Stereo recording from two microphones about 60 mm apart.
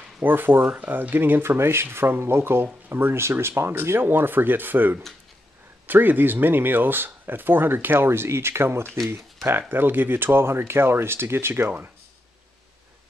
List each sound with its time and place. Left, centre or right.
0.2 s speech: right